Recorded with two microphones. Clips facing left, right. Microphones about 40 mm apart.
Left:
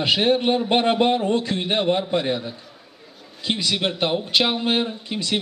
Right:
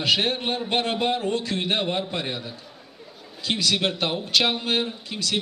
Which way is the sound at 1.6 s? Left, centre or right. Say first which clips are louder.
Left 4 dB; centre.